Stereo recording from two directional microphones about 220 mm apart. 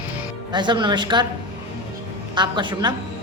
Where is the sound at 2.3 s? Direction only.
20° right (ahead or behind).